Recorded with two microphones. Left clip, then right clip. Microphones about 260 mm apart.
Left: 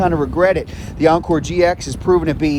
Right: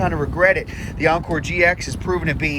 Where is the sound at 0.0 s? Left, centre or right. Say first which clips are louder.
Left 3 dB; left.